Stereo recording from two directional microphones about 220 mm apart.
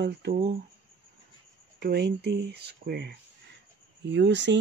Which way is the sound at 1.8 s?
50° right (ahead or behind).